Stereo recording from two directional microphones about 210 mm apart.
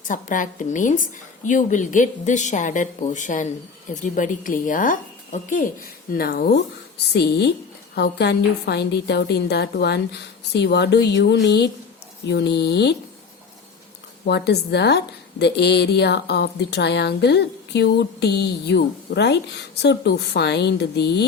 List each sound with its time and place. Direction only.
0.1 s a woman's voice: 40° left (ahead or behind)
14.3 s a woman's voice: 50° left (ahead or behind)